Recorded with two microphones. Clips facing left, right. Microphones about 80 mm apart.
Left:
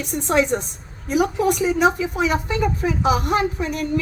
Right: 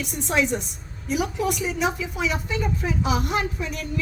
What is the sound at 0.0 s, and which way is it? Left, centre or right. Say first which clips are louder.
A woman's voice: left 4 dB; left.